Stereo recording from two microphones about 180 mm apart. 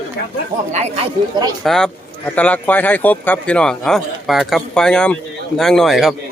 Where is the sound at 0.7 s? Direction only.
40° right (ahead or behind).